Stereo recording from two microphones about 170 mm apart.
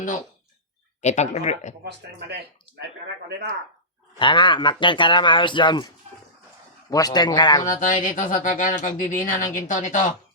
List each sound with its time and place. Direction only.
1.0 s speech: 40° left (ahead or behind)
1.8 s speech: 80° right
4.2 s speech: 30° left (ahead or behind)
6.9 s speech: 20° left (ahead or behind)
7.8 s speech: 50° left (ahead or behind)